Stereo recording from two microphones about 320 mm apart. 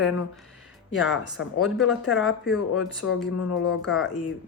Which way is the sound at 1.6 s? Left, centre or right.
Centre.